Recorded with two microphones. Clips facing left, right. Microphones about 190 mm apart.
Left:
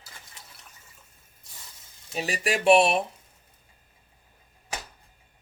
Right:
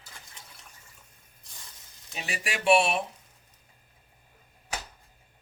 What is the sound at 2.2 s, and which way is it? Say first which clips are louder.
Speech: left 7 dB; 40° left (ahead or behind).